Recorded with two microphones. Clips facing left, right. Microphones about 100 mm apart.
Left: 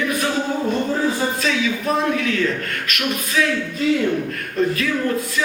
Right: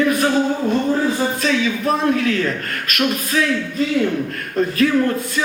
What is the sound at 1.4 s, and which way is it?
Speech, 35° right (ahead or behind).